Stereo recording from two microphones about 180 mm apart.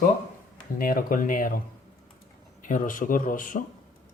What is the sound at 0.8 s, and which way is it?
Speech, 50° left (ahead or behind).